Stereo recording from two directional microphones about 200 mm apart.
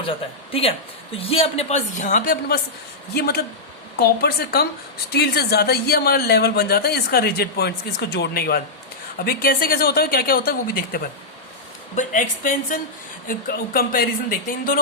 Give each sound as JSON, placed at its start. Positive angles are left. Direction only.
{"t": 0.0, "sound": "speech", "side_deg": 25}